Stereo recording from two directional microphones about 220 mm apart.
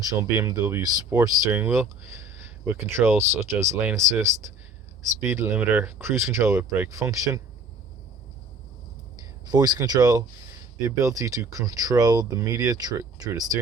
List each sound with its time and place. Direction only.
0.0 s speech: 15° right (ahead or behind)
9.5 s speech: 15° right (ahead or behind)